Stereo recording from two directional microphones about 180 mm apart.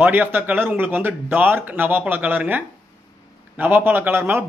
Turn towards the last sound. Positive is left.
turn(degrees=-10)  # may be behind; listen again after turning